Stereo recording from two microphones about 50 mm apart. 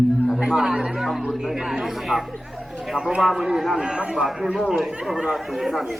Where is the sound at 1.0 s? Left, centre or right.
Centre.